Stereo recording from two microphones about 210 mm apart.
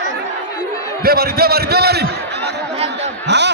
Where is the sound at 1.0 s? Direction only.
45° right (ahead or behind).